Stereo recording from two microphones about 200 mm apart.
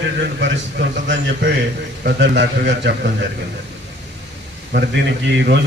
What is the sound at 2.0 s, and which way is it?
A man's voice, 65° right (ahead or behind).